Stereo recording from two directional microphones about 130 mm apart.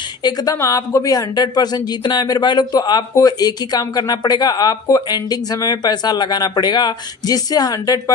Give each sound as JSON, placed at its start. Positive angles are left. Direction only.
{"t": 0.2, "sound": "speech", "side_deg": 30}